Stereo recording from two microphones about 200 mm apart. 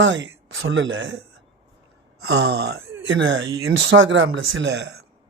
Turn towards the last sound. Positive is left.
turn(degrees=-60)  # may be behind; listen again after turning